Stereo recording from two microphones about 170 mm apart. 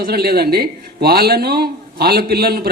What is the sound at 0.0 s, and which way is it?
A man's voice, 65° right (ahead or behind).